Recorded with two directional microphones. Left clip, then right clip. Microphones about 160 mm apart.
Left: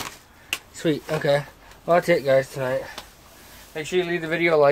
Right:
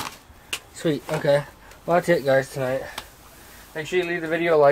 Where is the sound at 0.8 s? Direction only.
15° left (ahead or behind).